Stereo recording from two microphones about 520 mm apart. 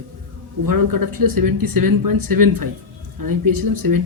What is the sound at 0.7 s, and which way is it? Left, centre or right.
Speech, right.